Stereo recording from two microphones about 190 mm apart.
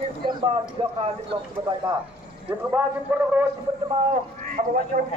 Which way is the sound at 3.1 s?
10° right (ahead or behind).